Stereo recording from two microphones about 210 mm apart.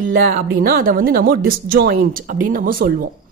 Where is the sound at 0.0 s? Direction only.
40° right (ahead or behind).